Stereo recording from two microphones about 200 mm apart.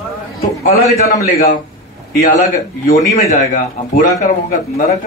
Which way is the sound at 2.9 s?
40° left (ahead or behind).